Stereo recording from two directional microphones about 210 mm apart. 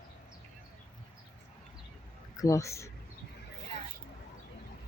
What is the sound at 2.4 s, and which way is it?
Speech, 15° left (ahead or behind).